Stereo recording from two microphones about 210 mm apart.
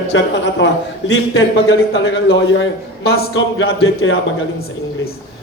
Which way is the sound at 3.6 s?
75° left (ahead or behind).